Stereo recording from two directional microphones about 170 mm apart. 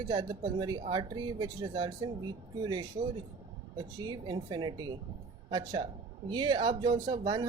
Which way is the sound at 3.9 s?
25° right (ahead or behind).